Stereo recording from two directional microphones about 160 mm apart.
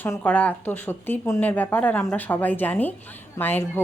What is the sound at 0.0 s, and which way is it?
Speech, 10° left (ahead or behind).